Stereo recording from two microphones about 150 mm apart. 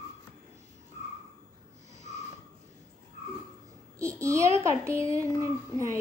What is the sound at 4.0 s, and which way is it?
A child's voice, 20° right (ahead or behind).